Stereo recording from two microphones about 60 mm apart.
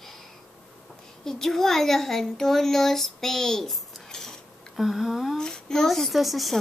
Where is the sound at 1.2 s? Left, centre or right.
Centre.